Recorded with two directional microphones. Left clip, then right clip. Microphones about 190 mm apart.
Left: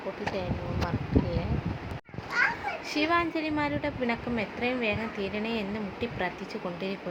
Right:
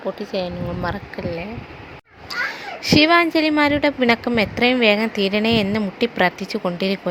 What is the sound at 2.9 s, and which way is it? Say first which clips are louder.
A woman's voice: right 13 dB; 50° right (ahead or behind).